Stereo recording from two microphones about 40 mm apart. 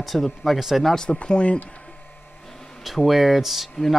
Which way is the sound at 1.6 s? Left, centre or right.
Left.